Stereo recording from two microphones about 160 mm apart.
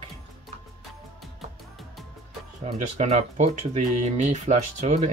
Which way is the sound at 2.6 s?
45° right (ahead or behind).